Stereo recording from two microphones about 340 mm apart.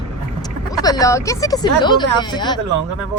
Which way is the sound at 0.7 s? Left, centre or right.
Centre.